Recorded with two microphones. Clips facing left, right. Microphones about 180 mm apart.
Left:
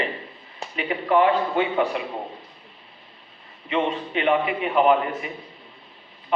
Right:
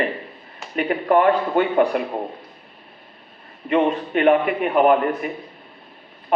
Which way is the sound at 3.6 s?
50° right (ahead or behind).